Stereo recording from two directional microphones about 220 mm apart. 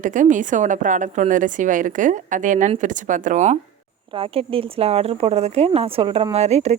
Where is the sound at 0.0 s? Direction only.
35° right (ahead or behind).